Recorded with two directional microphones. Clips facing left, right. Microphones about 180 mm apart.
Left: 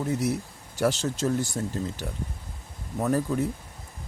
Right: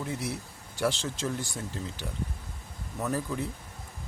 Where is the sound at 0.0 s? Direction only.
45° left (ahead or behind).